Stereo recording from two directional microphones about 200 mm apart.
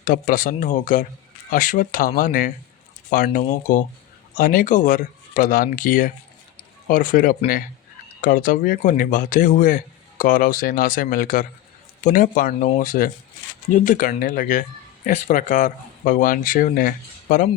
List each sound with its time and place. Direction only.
0.0 s speech: 45° left (ahead or behind)